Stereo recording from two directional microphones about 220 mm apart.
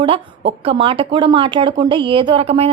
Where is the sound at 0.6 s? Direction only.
25° right (ahead or behind).